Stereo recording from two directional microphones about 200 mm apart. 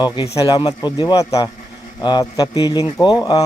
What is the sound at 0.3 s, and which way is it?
A man's voice, 20° left (ahead or behind).